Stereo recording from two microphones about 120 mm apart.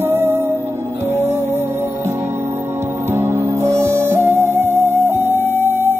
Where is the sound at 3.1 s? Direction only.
20° right (ahead or behind).